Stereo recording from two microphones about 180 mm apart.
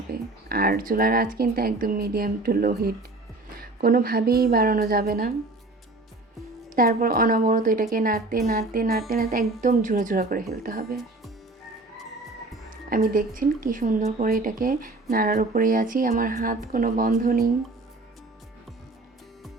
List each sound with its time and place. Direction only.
0.1 s speech: 55° right (ahead or behind)
6.7 s a woman's voice: 50° right (ahead or behind)
12.9 s a woman's voice: 50° right (ahead or behind)